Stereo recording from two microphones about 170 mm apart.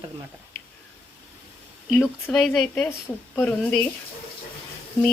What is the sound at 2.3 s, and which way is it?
Speech, centre (ahead or behind).